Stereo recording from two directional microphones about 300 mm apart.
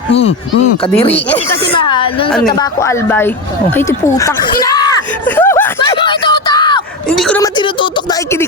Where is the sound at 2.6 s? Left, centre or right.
Centre.